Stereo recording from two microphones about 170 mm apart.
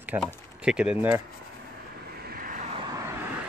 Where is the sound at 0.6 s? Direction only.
5° right (ahead or behind).